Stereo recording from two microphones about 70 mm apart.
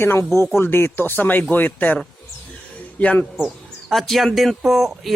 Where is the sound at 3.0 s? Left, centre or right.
Left.